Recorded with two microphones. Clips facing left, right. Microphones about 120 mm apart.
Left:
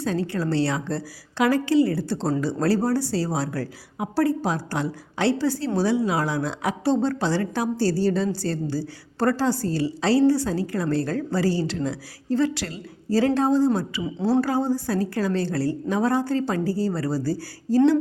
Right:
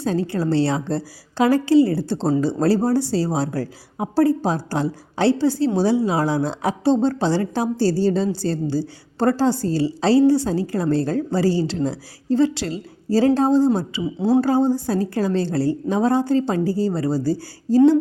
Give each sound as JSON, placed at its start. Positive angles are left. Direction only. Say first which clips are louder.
{"t": 0.0, "sound": "a woman's voice", "louder": "right 3 dB", "side_deg": -30}
{"t": 14.0, "sound": "speech", "louder": "right 4 dB", "side_deg": -10}
{"t": 14.7, "sound": "a woman's voice", "louder": "right 3 dB", "side_deg": -30}